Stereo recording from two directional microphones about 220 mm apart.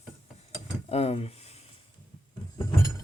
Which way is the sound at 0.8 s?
30° left (ahead or behind).